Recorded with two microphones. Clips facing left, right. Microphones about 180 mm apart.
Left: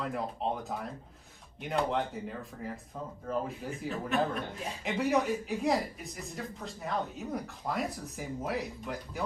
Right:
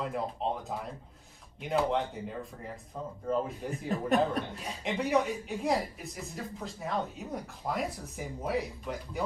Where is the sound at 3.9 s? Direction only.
40° right (ahead or behind).